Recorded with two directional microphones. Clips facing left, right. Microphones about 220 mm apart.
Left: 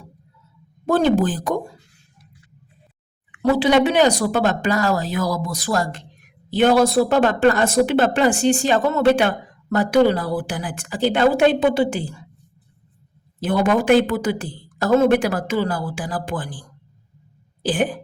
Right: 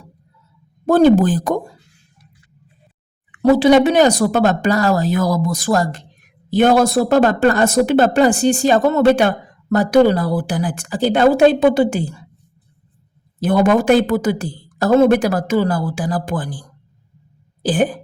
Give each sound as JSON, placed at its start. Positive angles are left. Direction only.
{"t": 0.9, "sound": "speech", "side_deg": -45}
{"t": 3.5, "sound": "a woman's voice", "side_deg": -45}
{"t": 13.4, "sound": "a woman's voice", "side_deg": -45}
{"t": 17.6, "sound": "a sound", "side_deg": -40}